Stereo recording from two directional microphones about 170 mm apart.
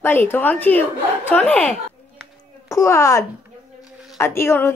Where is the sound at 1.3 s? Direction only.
10° left (ahead or behind).